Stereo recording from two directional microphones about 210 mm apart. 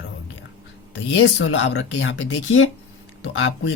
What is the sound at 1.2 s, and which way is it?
Speech, 65° left (ahead or behind).